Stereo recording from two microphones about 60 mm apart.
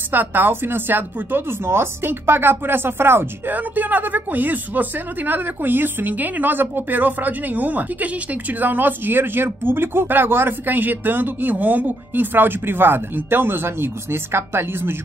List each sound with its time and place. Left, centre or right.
0.1 s speech: right
3.5 s speech: right